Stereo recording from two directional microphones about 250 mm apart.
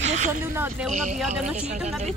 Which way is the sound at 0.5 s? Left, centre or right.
Centre.